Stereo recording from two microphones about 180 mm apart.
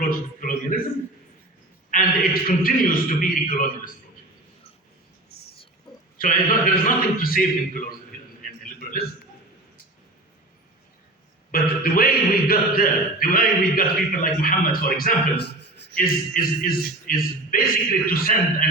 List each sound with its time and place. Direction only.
0.1 s speech: 50° left (ahead or behind)
1.9 s speech: 50° left (ahead or behind)
6.1 s speech: 50° left (ahead or behind)
8.6 s a sound: 50° left (ahead or behind)
11.5 s speech: 55° left (ahead or behind); by 15.9 s 70° left (ahead or behind)
16.0 s speech: 50° left (ahead or behind)